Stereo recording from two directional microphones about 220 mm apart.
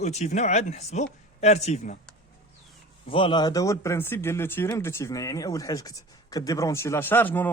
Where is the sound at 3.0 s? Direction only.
20° left (ahead or behind).